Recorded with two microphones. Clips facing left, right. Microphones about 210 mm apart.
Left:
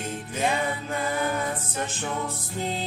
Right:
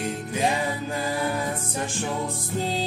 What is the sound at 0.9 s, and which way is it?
Chant, 30° right (ahead or behind).